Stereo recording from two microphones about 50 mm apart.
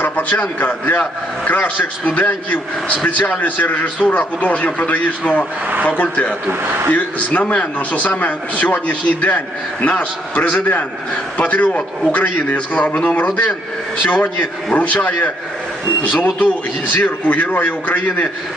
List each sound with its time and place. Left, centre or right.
0.0 s a man's voice: left
5.7 s speech: right
6.0 s speech: left
6.5 s a man's voice: right
6.9 s a man's voice: left